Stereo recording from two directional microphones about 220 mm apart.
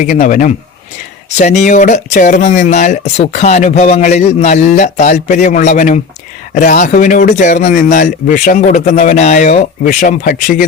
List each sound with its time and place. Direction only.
0.0 s speech: 35° left (ahead or behind)